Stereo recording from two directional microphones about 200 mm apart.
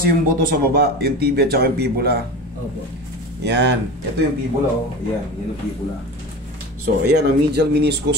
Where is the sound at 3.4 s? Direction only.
60° right (ahead or behind).